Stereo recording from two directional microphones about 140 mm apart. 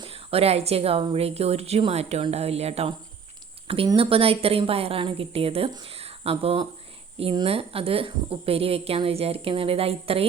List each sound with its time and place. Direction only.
0.0 s speech: 45° right (ahead or behind)